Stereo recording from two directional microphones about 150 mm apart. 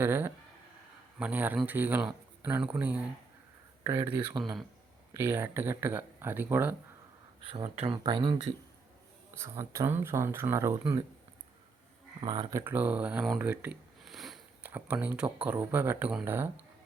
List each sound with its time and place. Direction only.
0.0 s speech: 15° right (ahead or behind)
7.4 s speech: 35° right (ahead or behind)
9.4 s speech: 20° right (ahead or behind)
12.2 s speech: 30° right (ahead or behind)
12.5 s speech: 10° right (ahead or behind)